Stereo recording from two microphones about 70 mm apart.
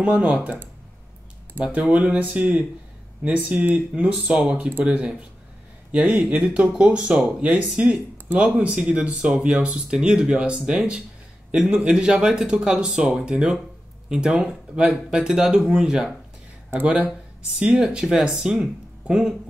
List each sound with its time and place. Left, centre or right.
0.2 s speech: centre
1.6 s speech: centre
5.9 s speech: centre
17.7 s speech: centre